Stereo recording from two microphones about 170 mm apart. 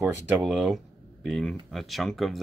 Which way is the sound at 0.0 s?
5° right (ahead or behind).